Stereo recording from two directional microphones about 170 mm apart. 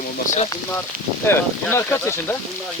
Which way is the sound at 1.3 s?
15° left (ahead or behind).